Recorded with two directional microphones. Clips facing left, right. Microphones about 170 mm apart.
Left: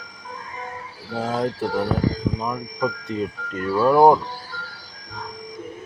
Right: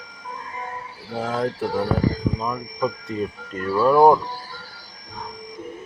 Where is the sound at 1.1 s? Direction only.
10° left (ahead or behind).